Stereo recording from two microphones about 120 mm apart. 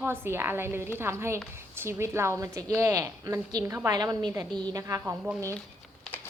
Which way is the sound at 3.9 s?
35° right (ahead or behind).